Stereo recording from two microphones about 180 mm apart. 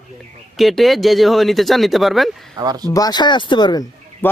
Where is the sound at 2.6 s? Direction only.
20° right (ahead or behind).